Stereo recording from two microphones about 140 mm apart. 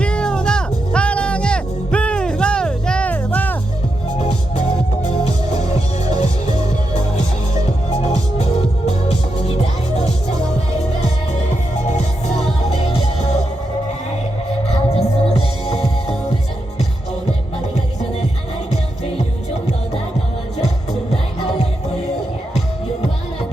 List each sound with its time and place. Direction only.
0.0 s music: 5° left (ahead or behind)
5.0 s music: 55° left (ahead or behind)
11.9 s music: 55° left (ahead or behind)
14.7 s music: 50° left (ahead or behind)